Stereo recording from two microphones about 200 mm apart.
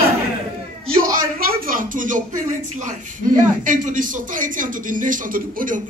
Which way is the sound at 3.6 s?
40° right (ahead or behind).